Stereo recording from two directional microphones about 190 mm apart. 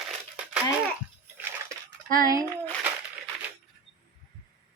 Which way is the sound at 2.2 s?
20° right (ahead or behind).